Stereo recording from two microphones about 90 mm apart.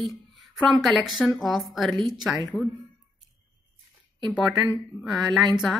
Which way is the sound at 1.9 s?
55° right (ahead or behind).